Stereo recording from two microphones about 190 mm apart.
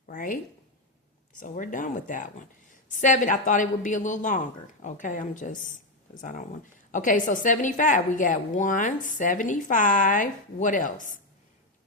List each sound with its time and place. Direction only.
0.1 s speech: 45° left (ahead or behind)
1.4 s a woman's voice: 45° left (ahead or behind)